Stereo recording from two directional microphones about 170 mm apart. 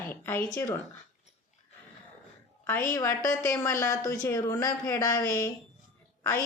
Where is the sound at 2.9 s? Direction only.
20° left (ahead or behind).